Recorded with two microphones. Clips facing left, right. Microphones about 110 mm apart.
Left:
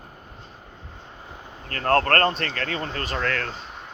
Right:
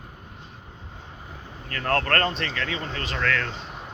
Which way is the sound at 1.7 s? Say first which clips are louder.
Left 4 dB; 40° left (ahead or behind).